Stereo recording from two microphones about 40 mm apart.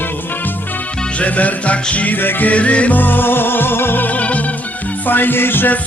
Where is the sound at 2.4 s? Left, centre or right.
Left.